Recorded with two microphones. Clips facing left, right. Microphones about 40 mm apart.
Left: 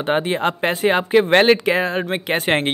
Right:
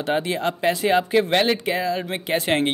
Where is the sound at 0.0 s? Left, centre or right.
Left.